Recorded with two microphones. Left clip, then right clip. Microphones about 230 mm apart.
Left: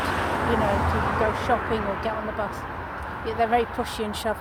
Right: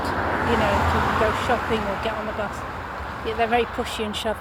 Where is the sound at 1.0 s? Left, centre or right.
Right.